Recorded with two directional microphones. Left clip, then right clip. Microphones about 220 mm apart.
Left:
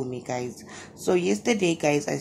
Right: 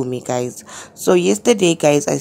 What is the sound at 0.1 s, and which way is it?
Speech, 45° right (ahead or behind).